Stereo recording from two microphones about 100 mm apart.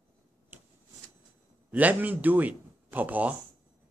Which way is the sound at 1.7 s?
15° right (ahead or behind).